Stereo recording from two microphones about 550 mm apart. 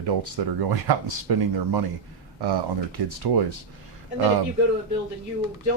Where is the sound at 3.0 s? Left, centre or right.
Right.